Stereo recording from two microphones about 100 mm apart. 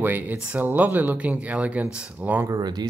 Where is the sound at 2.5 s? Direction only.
45° right (ahead or behind).